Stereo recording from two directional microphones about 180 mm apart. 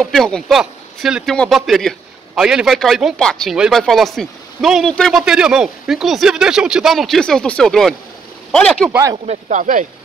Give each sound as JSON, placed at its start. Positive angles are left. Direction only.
{"t": 0.0, "sound": "a man's voice", "side_deg": 0}
{"t": 9.1, "sound": "speech", "side_deg": -35}